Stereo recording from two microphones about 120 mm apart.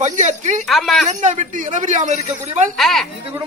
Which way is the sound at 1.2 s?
85° right.